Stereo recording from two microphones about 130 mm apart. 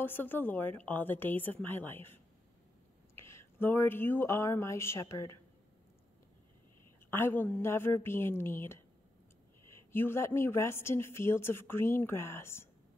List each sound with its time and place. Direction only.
0.0 s a woman's voice: 15° left (ahead or behind)
3.2 s speech: 20° left (ahead or behind)
7.1 s a woman's voice: 15° left (ahead or behind)